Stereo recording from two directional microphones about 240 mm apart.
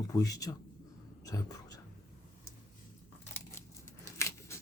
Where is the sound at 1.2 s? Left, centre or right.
Centre.